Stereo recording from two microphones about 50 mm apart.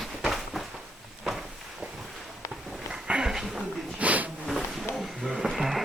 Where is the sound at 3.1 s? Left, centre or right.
Right.